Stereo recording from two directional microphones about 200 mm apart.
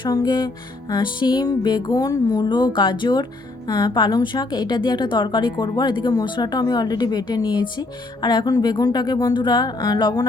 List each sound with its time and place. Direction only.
0.0 s speech: 20° left (ahead or behind)